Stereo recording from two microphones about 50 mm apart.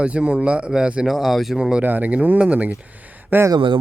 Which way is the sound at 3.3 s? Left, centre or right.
Right.